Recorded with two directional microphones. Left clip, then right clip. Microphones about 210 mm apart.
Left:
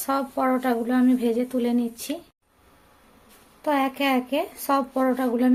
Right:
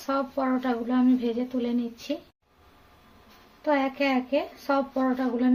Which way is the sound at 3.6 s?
35° left (ahead or behind).